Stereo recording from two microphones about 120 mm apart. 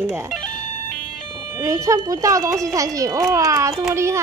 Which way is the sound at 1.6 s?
25° right (ahead or behind).